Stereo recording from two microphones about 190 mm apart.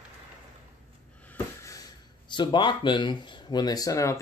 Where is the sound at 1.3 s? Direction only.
15° left (ahead or behind).